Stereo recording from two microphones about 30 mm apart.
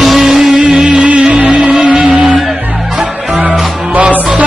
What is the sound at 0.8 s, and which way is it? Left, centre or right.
Music, right.